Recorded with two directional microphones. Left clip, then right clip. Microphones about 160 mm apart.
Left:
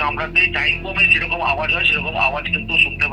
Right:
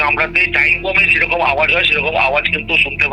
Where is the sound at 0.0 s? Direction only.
40° right (ahead or behind).